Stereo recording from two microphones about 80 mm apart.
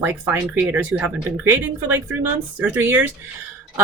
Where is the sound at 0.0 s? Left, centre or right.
Right.